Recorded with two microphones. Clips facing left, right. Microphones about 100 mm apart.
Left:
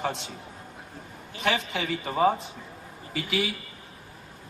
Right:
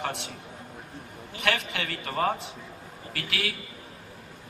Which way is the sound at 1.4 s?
65° right (ahead or behind).